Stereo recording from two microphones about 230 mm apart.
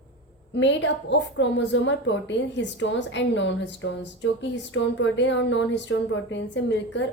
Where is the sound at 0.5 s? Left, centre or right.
Left.